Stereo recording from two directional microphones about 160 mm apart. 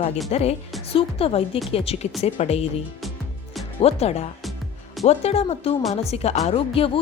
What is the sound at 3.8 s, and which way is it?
Speech, 40° left (ahead or behind).